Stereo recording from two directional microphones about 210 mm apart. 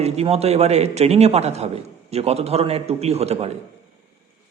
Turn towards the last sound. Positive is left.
turn(degrees=-30)  # may be behind; listen again after turning